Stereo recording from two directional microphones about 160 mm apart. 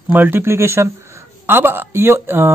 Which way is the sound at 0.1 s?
10° right (ahead or behind).